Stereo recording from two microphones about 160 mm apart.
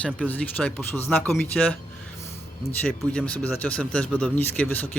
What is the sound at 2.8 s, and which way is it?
Speech, 5° left (ahead or behind).